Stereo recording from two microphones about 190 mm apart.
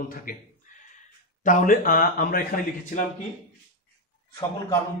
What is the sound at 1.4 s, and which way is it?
A man's voice, 45° left (ahead or behind).